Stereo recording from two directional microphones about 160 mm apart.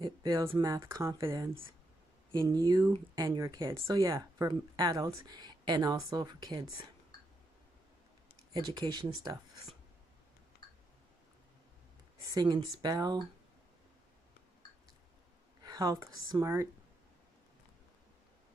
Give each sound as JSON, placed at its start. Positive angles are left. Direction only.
{"t": 0.0, "sound": "a sound", "side_deg": -20}
{"t": 0.6, "sound": "speech", "side_deg": -15}
{"t": 8.5, "sound": "speech", "side_deg": -25}
{"t": 12.3, "sound": "speech", "side_deg": -25}
{"t": 15.6, "sound": "speech", "side_deg": -25}